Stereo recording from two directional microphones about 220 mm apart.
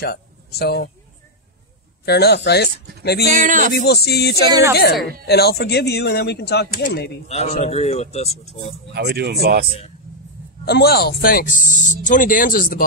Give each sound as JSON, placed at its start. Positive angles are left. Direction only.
{"t": 0.0, "sound": "speech", "side_deg": 45}
{"t": 2.0, "sound": "speech", "side_deg": 45}
{"t": 3.3, "sound": "music", "side_deg": -35}
{"t": 3.7, "sound": "speech", "side_deg": 45}
{"t": 4.5, "sound": "a woman's voice", "side_deg": -15}
{"t": 5.2, "sound": "speech", "side_deg": 45}
{"t": 7.2, "sound": "speech", "side_deg": 30}
{"t": 8.9, "sound": "speech", "side_deg": -45}
{"t": 10.6, "sound": "speech", "side_deg": 45}